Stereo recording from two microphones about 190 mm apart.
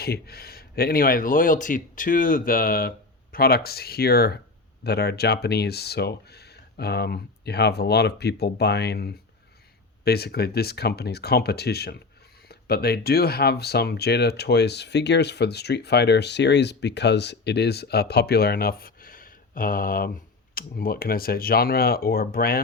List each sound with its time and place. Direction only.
0.0 s speech: 55° left (ahead or behind)